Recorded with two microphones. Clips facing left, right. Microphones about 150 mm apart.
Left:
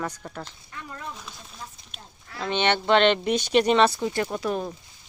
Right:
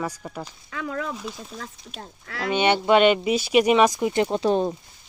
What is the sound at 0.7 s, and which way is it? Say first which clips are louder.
Speech: right 9 dB; 90° right.